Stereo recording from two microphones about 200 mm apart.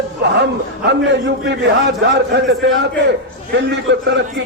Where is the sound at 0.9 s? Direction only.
60° right (ahead or behind).